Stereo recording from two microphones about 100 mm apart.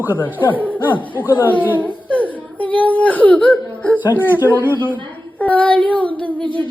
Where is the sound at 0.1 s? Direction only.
20° left (ahead or behind).